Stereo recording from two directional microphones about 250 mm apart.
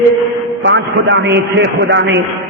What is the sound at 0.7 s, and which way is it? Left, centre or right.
A man's voice, right.